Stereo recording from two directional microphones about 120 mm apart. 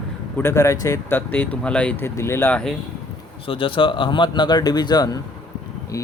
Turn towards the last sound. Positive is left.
turn(degrees=35)  # may be behind; listen again after turning